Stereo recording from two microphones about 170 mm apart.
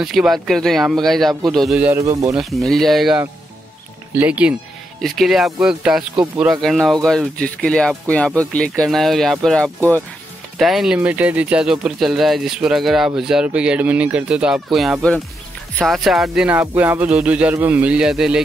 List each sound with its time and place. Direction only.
0.0 s speech: centre (ahead or behind)
1.9 s speech: 15° right (ahead or behind)
2.3 s speech: centre (ahead or behind)